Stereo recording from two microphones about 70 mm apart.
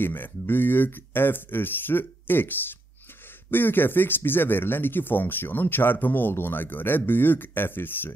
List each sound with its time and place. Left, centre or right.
0.0 s speech: left